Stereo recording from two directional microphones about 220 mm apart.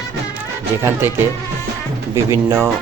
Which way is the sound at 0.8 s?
10° right (ahead or behind).